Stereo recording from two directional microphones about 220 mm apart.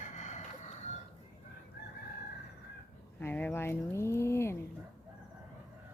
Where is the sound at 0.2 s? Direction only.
35° left (ahead or behind).